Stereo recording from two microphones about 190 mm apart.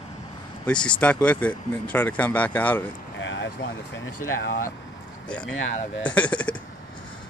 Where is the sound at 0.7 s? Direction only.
5° left (ahead or behind).